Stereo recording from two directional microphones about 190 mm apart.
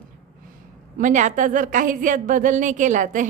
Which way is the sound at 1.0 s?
40° right (ahead or behind).